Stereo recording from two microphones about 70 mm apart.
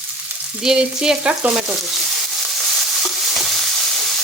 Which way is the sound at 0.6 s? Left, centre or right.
Centre.